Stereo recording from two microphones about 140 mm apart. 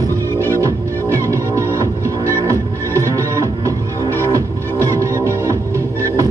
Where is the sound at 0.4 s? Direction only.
20° right (ahead or behind).